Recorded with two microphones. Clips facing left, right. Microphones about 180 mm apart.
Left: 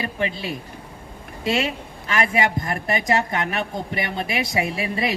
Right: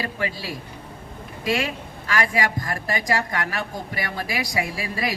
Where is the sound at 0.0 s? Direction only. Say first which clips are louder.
Left 2 dB; 20° left (ahead or behind).